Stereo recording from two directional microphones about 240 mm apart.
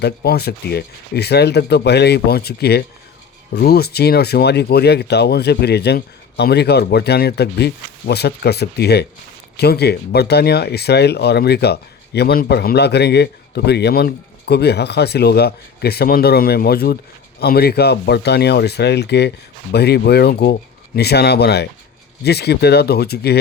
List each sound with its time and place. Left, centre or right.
0.0 s speech: left